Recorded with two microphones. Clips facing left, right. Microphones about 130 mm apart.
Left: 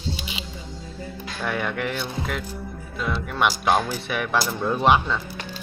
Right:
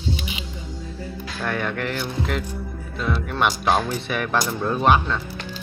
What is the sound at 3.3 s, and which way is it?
Speech, 5° left (ahead or behind).